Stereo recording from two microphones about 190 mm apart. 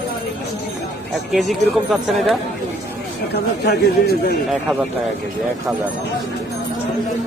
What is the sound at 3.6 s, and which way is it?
Speech, 55° left (ahead or behind).